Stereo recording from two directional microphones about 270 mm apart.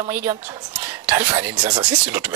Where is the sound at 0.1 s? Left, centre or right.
Centre.